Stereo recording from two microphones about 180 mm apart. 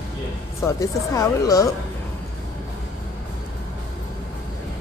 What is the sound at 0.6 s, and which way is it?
Speech, 15° left (ahead or behind).